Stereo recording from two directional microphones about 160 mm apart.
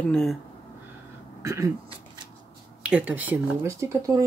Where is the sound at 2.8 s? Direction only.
10° right (ahead or behind).